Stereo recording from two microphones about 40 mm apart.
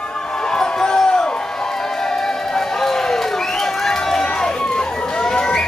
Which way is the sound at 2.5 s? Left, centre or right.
Centre.